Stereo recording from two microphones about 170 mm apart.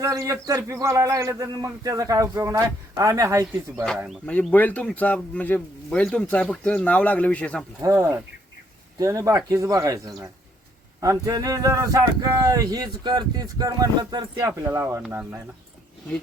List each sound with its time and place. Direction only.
0.0 s speech: 20° right (ahead or behind)
3.8 s speech: centre (ahead or behind)
7.8 s speech: 20° right (ahead or behind)